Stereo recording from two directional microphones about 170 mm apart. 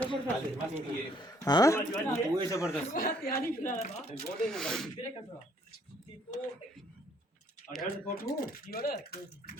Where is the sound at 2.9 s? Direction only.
55° left (ahead or behind).